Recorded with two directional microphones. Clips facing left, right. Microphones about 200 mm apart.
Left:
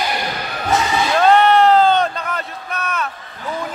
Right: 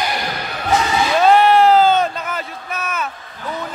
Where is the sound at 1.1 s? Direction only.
5° right (ahead or behind).